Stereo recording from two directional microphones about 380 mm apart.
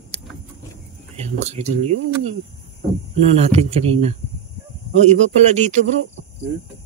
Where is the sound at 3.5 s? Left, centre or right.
Centre.